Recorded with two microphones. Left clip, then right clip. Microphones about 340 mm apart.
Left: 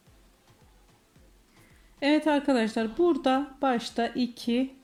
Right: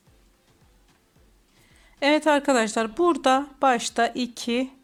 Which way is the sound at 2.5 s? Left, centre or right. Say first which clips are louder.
Right 5 dB; centre.